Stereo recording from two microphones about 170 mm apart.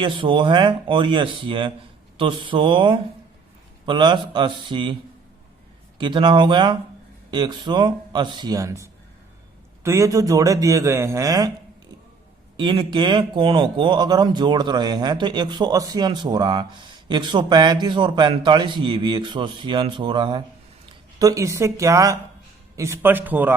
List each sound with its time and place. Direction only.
0.0 s speech: 30° right (ahead or behind)
6.0 s speech: 30° right (ahead or behind)
12.5 s speech: 25° right (ahead or behind); by 23.6 s 10° right (ahead or behind)